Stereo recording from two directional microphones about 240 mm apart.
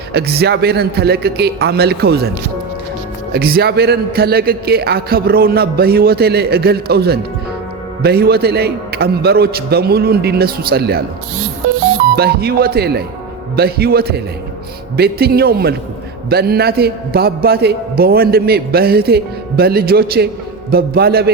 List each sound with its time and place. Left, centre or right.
0.1 s a man's voice: right
3.3 s a man's voice: right
12.1 s a man's voice: right